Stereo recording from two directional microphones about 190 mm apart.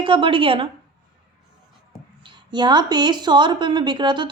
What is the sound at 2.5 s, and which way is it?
A woman's voice, 25° right (ahead or behind).